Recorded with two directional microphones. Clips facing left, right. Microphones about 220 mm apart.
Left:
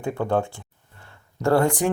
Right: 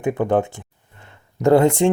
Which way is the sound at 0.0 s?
20° right (ahead or behind).